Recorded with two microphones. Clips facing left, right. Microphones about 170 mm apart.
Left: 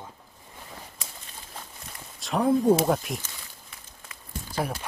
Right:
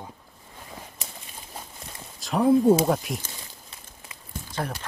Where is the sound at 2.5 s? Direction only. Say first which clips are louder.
Right 3 dB; 15° right (ahead or behind).